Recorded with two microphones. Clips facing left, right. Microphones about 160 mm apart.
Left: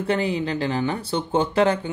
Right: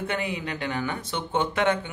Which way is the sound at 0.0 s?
30° left (ahead or behind).